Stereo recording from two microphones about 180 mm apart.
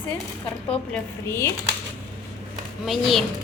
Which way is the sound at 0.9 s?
15° left (ahead or behind).